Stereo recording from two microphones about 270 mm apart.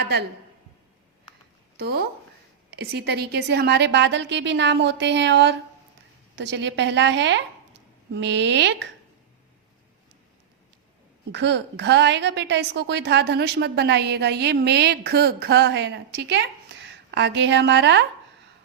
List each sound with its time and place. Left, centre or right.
0.0 s a woman's voice: right
1.7 s a woman's voice: right
11.3 s a woman's voice: right